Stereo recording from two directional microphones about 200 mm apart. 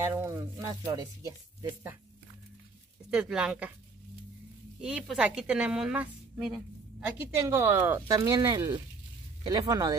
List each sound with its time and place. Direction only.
0.0 s speech: 10° right (ahead or behind)
3.1 s a woman's voice: 5° right (ahead or behind)
4.8 s a woman's voice: 5° right (ahead or behind)
7.2 s speech: 15° right (ahead or behind)